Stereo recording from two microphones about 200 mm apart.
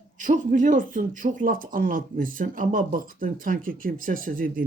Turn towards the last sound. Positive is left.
turn(degrees=-45)  # may be behind; listen again after turning